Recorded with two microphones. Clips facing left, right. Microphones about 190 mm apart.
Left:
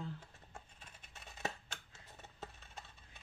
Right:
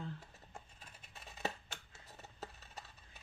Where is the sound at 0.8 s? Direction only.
Centre (ahead or behind).